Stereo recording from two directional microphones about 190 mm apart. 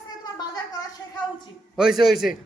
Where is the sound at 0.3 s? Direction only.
20° left (ahead or behind).